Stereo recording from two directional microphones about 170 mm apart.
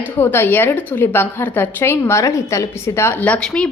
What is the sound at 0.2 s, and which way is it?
A woman's voice, 10° left (ahead or behind).